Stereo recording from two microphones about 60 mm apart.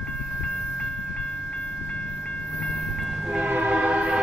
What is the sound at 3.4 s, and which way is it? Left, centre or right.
Train, right.